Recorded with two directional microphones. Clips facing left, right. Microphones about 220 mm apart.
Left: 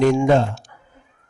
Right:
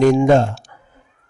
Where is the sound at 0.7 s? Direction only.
45° right (ahead or behind).